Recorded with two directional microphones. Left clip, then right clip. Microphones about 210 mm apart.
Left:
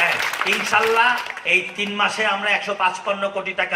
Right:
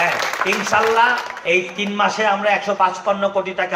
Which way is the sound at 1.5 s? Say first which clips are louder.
Right 1 dB; 40° right (ahead or behind).